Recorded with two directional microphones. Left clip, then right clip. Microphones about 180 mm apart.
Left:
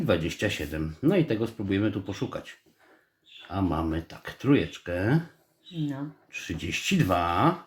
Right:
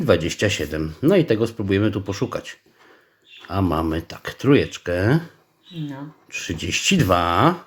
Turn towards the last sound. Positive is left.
turn(degrees=-35)  # may be behind; listen again after turning